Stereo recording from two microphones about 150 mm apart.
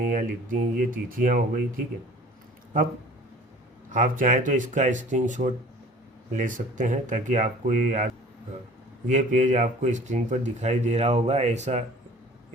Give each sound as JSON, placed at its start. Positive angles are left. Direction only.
{"t": 0.0, "sound": "speech", "side_deg": -60}
{"t": 3.9, "sound": "speech", "side_deg": -65}